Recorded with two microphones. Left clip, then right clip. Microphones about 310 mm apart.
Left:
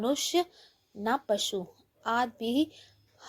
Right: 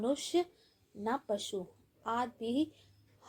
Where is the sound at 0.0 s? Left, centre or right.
Left.